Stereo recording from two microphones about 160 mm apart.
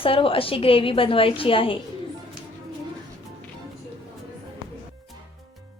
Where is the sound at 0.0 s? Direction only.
35° left (ahead or behind).